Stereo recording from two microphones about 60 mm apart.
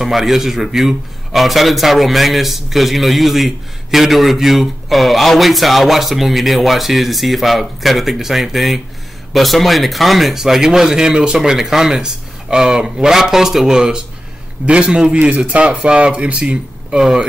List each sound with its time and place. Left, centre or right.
0.0 s a man's voice: centre; by 17.0 s right
17.0 s speech: centre